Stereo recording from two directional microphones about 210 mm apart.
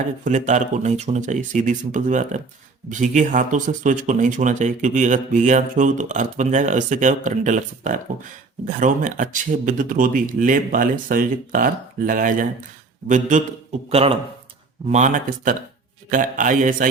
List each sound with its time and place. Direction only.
0.3 s speech: 35° right (ahead or behind)